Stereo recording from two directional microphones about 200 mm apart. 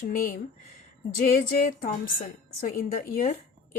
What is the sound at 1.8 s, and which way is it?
Speech, 45° left (ahead or behind).